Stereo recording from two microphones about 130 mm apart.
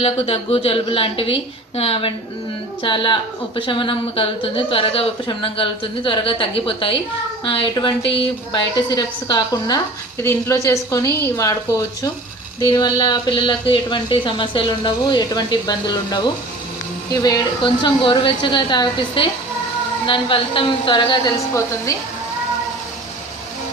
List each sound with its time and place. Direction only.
0.0 s a woman's voice: 50° left (ahead or behind)
21.3 s a woman's voice: 25° left (ahead or behind)